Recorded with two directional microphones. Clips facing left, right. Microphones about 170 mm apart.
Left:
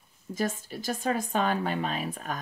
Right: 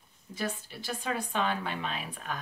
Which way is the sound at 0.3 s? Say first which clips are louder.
Left 5 dB; 45° left (ahead or behind).